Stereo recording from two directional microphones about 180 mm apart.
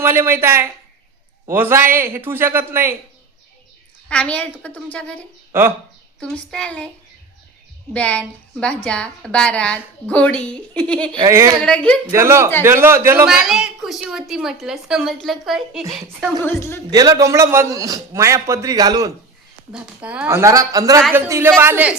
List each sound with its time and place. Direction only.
0.0 s a man's voice: 10° right (ahead or behind)
4.1 s a woman's voice: 5° left (ahead or behind)
5.5 s speech: 15° right (ahead or behind)
6.1 s a woman's voice: 5° left (ahead or behind)
7.9 s a woman's voice: 5° left (ahead or behind)
11.1 s a child's voice: 20° right (ahead or behind)
11.6 s a woman's voice: 5° left (ahead or behind)
12.1 s a man's voice: 15° right (ahead or behind)
13.2 s a woman's voice: centre (ahead or behind)
16.4 s a woman's voice: 15° left (ahead or behind)
16.9 s a man's voice: 20° right (ahead or behind)
19.7 s a man's voice: 5° right (ahead or behind)